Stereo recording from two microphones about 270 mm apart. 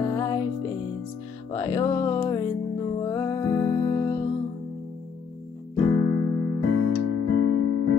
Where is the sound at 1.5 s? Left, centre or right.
Centre.